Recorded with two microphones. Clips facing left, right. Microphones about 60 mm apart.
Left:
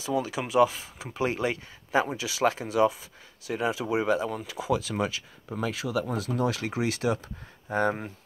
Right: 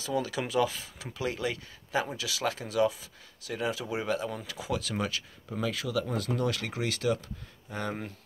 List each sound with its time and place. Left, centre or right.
0.0 s speech: left